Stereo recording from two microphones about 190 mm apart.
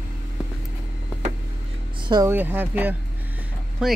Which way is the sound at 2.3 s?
10° right (ahead or behind).